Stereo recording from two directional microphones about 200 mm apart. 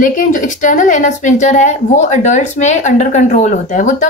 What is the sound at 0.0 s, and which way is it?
A woman's voice, 40° left (ahead or behind).